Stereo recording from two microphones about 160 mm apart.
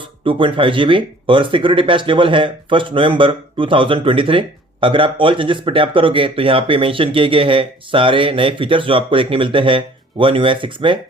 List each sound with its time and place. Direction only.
0.3 s speech: 30° right (ahead or behind)